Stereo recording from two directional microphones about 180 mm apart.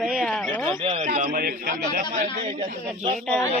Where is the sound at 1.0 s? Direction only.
50° right (ahead or behind).